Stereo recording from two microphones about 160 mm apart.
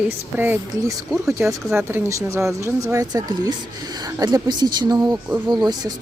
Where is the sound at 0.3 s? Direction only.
15° right (ahead or behind).